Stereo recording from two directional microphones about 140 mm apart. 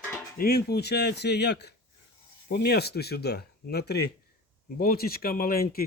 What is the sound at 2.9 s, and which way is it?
Speech, 90° left.